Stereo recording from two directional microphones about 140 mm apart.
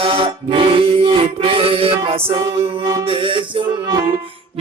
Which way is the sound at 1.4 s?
40° right (ahead or behind).